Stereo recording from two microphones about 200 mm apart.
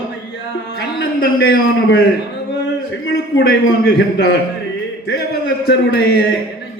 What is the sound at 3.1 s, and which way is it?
A man's voice, 55° left (ahead or behind).